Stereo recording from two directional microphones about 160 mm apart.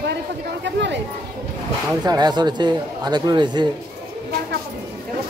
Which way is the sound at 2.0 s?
25° right (ahead or behind).